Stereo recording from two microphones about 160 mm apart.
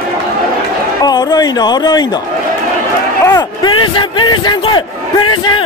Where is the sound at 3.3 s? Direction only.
30° left (ahead or behind).